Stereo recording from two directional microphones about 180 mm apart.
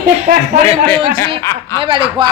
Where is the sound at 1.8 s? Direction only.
30° right (ahead or behind).